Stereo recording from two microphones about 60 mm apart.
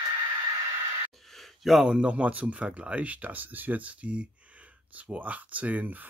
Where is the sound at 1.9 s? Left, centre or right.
Centre.